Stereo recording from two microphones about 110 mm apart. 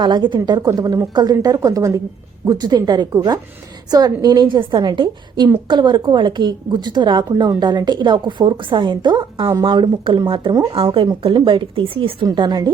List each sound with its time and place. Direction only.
0.0 s a woman's voice: 45° right (ahead or behind)
12.2 s a woman's voice: 40° right (ahead or behind)